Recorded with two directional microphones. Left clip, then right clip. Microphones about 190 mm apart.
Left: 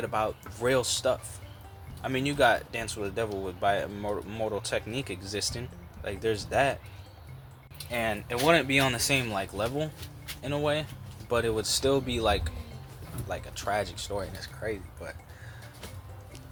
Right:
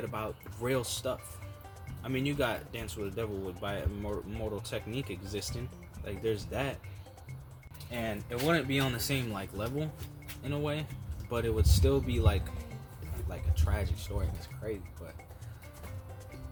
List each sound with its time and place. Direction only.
0.0 s speech: 15° right (ahead or behind)
7.9 s speech: centre (ahead or behind)